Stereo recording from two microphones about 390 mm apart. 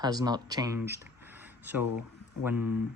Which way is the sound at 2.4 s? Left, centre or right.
Centre.